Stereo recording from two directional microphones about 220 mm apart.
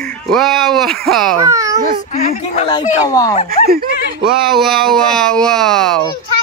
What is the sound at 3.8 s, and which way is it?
Speech, 45° left (ahead or behind).